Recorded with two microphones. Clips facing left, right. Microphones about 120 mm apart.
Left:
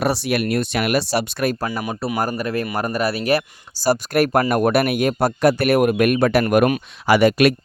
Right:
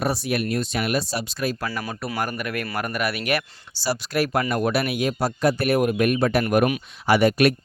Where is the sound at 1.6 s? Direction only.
20° left (ahead or behind).